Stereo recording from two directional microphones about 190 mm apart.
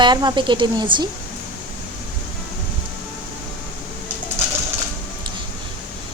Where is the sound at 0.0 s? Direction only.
20° right (ahead or behind).